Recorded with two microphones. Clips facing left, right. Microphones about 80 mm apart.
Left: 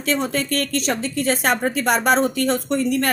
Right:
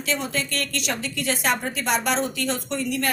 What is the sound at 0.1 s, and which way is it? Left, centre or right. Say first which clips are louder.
A woman's voice: left 6 dB; left.